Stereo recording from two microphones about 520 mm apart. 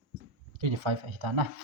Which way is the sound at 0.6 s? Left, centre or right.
Right.